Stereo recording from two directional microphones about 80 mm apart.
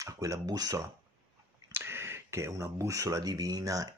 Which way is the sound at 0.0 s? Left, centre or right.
Right.